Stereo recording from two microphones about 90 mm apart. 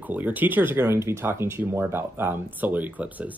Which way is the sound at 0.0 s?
20° right (ahead or behind).